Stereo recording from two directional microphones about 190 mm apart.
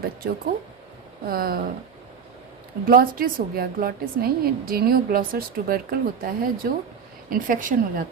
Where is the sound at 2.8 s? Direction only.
50° right (ahead or behind).